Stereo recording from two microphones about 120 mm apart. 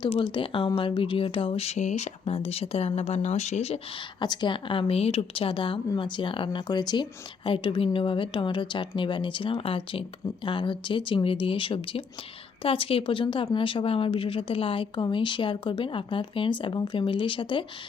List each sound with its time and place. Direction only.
0.0 s speech: 45° left (ahead or behind); by 3.8 s 65° left (ahead or behind)
4.2 s speech: 40° left (ahead or behind)